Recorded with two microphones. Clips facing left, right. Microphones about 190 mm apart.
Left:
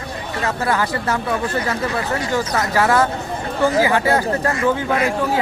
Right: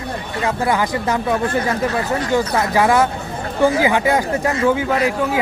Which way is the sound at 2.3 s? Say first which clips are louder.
Right 3 dB; 15° right (ahead or behind).